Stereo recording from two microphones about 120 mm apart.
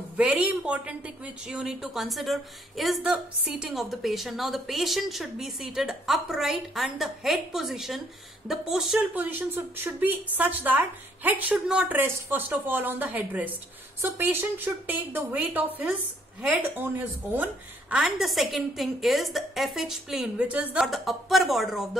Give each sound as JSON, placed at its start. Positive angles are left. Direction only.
{"t": 0.2, "sound": "a woman's voice", "side_deg": -10}
{"t": 20.8, "sound": "a woman's voice", "side_deg": 0}